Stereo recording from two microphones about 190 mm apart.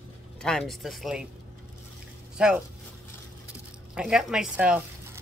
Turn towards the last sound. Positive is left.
turn(degrees=-5)  # may be behind; listen again after turning